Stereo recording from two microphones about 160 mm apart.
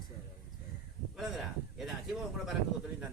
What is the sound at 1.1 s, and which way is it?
Speech, centre (ahead or behind).